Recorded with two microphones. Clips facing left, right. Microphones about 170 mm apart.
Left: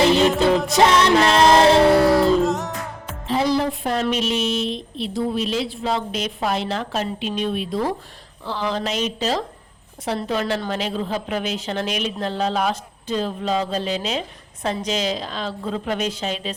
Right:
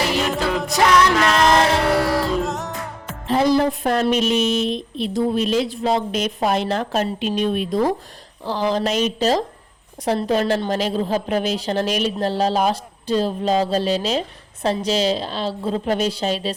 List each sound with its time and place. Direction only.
0.0 s music: 25° left (ahead or behind)
2.4 s music: centre (ahead or behind)
3.2 s music: 50° right (ahead or behind)
4.1 s a woman's voice: 45° right (ahead or behind)